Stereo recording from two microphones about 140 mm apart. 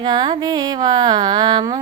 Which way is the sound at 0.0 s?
30° right (ahead or behind).